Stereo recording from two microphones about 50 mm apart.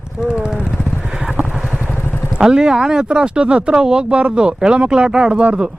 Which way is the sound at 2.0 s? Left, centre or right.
Left.